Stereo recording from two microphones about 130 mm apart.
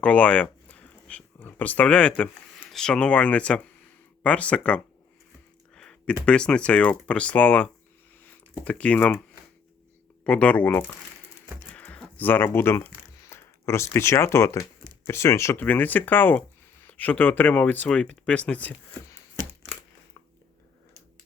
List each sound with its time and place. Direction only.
0.0 s speech: 10° left (ahead or behind)
5.7 s a sound: 5° left (ahead or behind)
6.2 s speech: 5° left (ahead or behind)
10.2 s speech: 10° left (ahead or behind)
11.7 s a sound: 10° left (ahead or behind)
13.2 s speech: 20° left (ahead or behind)